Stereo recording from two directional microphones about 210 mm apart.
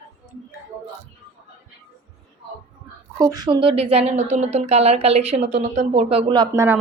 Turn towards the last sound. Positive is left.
turn(degrees=-15)  # may be behind; listen again after turning